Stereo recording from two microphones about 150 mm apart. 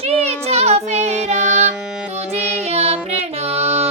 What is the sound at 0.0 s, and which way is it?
Child singing, 45° right (ahead or behind).